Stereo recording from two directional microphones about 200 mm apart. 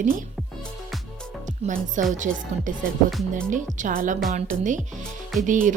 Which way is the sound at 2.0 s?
40° right (ahead or behind).